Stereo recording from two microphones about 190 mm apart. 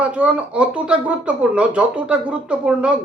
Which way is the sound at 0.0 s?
5° right (ahead or behind).